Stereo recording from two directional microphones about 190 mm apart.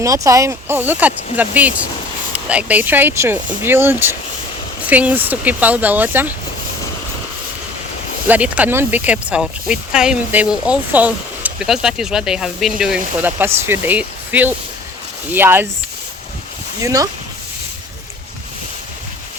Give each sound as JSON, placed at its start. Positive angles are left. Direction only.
{"t": 0.0, "sound": "speech", "side_deg": -15}
{"t": 8.3, "sound": "speech", "side_deg": -5}
{"t": 16.8, "sound": "speech", "side_deg": -15}